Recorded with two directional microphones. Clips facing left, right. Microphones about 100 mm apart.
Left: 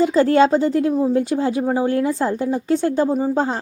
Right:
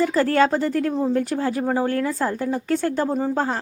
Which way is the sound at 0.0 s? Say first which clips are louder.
Left 4 dB; 20° left (ahead or behind).